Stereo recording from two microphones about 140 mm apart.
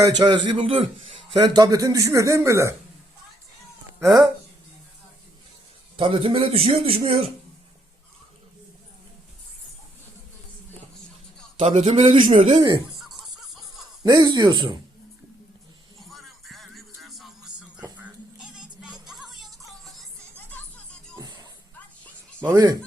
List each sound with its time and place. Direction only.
0.4 s a man's voice: 40° right (ahead or behind); by 2.7 s 20° right (ahead or behind)
4.0 s a man's voice: 25° right (ahead or behind)
6.0 s a man's voice: 40° right (ahead or behind)
11.6 s a man's voice: 50° right (ahead or behind); by 12.8 s 35° right (ahead or behind)
13.0 s music: centre (ahead or behind)
14.0 s a man's voice: 30° right (ahead or behind)
16.0 s music: centre (ahead or behind)
22.5 s a man's voice: 25° right (ahead or behind)